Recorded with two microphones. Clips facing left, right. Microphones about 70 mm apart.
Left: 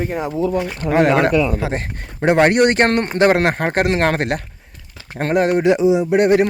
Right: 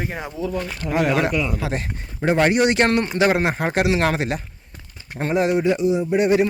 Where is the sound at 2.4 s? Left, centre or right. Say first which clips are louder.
Left 3 dB; left.